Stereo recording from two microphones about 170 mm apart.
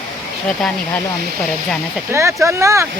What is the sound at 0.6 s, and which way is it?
Speech, 5° left (ahead or behind).